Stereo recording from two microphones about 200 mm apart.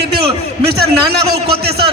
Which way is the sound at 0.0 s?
55° right (ahead or behind).